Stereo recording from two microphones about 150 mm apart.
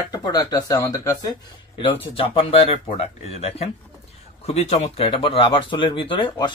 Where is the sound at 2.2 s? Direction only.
35° left (ahead or behind).